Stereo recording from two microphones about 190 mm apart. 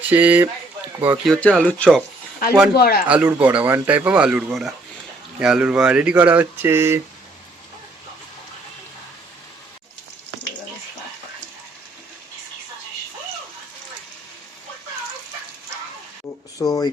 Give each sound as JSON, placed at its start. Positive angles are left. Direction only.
{"t": 0.1, "sound": "speech", "side_deg": -10}
{"t": 1.2, "sound": "speech", "side_deg": 5}
{"t": 2.7, "sound": "speech", "side_deg": 55}
{"t": 3.1, "sound": "speech", "side_deg": -5}
{"t": 16.6, "sound": "a sound", "side_deg": 20}